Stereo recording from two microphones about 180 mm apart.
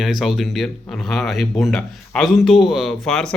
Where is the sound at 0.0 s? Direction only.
Centre (ahead or behind).